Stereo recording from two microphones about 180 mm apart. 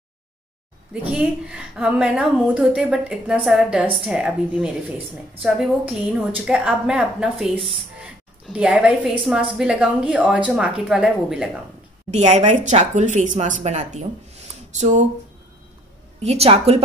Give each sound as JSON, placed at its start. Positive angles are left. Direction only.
{"t": 1.1, "sound": "a woman's voice", "side_deg": -5}
{"t": 12.1, "sound": "a woman's voice", "side_deg": -40}
{"t": 16.2, "sound": "a woman's voice", "side_deg": -35}